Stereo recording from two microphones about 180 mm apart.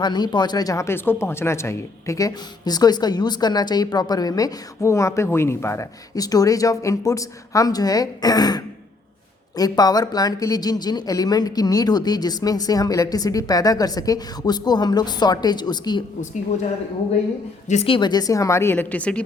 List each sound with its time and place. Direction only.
0.0 s speech: 25° left (ahead or behind)
17.7 s a woman's voice: 35° left (ahead or behind); by 19.2 s 5° left (ahead or behind)